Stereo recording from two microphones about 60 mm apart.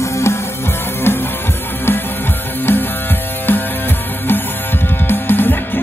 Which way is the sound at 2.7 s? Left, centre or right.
Left.